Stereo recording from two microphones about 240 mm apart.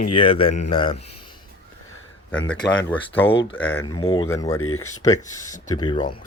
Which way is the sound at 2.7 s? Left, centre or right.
Centre.